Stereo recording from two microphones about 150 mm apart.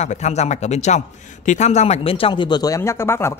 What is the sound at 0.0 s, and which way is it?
A man's voice, 50° left (ahead or behind).